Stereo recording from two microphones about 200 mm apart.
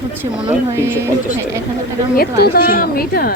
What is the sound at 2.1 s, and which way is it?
A woman's voice, 50° left (ahead or behind).